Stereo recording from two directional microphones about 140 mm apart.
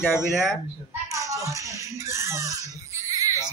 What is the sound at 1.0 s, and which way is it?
A child's voice, 25° right (ahead or behind).